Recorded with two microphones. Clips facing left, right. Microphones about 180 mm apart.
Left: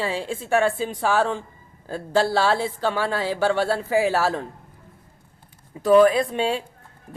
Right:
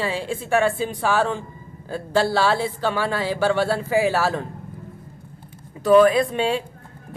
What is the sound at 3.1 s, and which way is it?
Speech, 35° left (ahead or behind).